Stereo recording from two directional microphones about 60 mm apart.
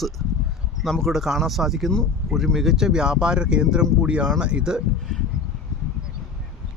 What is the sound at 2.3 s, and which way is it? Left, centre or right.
Speech, centre.